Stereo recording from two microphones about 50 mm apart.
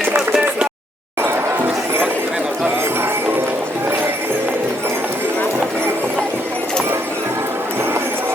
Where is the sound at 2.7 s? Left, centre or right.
Right.